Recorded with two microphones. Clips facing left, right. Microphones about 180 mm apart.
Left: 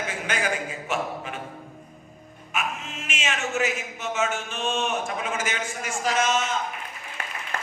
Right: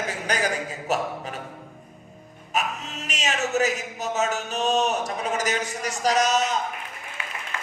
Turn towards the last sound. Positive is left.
turn(degrees=45)  # may be behind; listen again after turning